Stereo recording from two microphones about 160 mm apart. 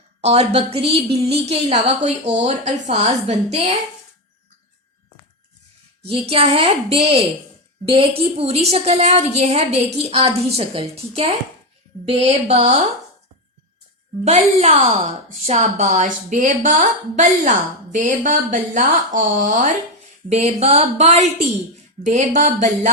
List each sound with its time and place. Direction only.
0.2 s a woman's voice: 40° right (ahead or behind)
6.1 s a woman's voice: 40° right (ahead or behind)
14.3 s a woman's voice: 40° right (ahead or behind)